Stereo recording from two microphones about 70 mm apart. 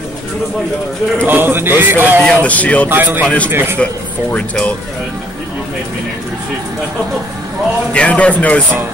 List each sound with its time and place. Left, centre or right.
1.2 s a man's voice: right
2.2 s a man's voice: centre
2.9 s a man's voice: right
3.8 s speech: centre
7.9 s a man's voice: centre